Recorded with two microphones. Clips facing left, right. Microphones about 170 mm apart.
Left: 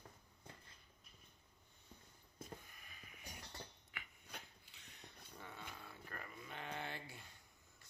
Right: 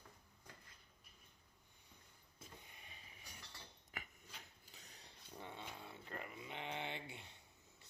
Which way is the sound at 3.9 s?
40° right (ahead or behind).